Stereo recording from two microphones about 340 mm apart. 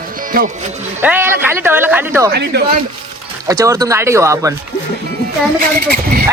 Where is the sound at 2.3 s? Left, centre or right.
Right.